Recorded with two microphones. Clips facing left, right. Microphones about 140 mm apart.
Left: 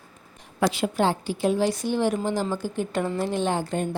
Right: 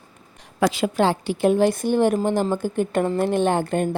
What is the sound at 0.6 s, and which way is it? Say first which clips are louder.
A woman's voice: right 3 dB; 90° right.